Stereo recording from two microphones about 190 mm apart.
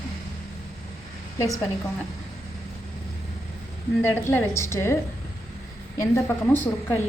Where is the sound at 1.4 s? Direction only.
15° left (ahead or behind).